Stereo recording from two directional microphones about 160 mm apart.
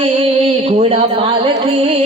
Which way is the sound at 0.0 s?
40° right (ahead or behind).